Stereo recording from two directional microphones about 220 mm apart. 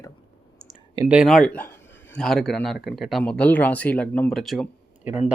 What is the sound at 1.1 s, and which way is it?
Speech, centre (ahead or behind).